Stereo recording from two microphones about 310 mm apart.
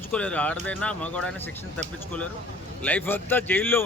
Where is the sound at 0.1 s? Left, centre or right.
Centre.